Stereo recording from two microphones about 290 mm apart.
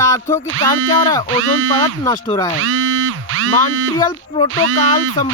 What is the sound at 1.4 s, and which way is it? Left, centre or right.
Speech, right.